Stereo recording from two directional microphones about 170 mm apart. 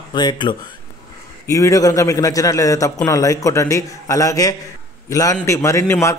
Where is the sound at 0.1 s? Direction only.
25° left (ahead or behind).